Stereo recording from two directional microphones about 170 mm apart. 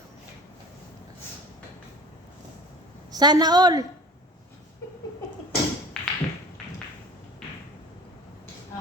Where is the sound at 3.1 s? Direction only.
25° right (ahead or behind).